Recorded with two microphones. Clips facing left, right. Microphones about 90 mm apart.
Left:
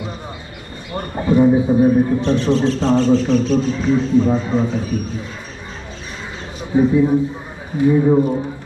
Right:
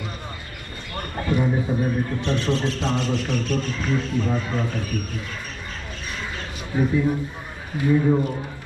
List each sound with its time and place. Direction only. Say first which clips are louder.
0.9 s a man's voice: left 9 dB; 15° left (ahead or behind)
6.7 s a man's voice: left 8 dB; 20° left (ahead or behind)